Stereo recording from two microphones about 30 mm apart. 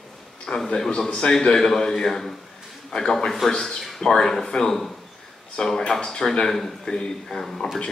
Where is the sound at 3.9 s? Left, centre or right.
Centre.